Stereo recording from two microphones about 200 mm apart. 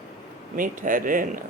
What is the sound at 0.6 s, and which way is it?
Speech, 40° right (ahead or behind).